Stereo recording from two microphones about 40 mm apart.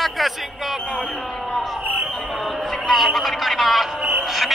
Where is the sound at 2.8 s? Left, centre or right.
Centre.